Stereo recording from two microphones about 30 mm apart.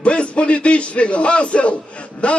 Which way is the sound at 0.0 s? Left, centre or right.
Left.